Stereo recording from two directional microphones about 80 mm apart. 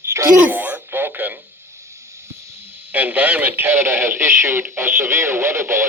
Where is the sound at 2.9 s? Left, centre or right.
Right.